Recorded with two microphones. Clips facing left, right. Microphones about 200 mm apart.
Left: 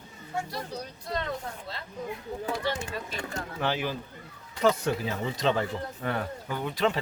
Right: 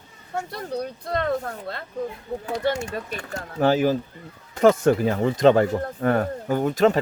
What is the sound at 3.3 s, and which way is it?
Speech, 45° right (ahead or behind).